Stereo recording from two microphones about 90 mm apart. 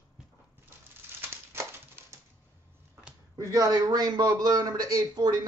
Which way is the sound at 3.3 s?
40° right (ahead or behind).